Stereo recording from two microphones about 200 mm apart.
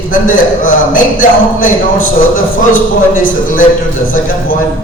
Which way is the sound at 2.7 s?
40° left (ahead or behind).